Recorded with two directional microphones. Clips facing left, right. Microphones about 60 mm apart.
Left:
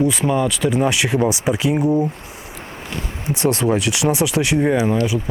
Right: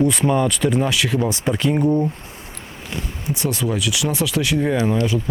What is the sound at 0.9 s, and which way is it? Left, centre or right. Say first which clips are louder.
Speech: left 3 dB; left.